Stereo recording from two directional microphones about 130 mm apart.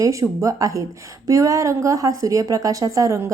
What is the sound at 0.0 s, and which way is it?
A woman's voice, 25° right (ahead or behind).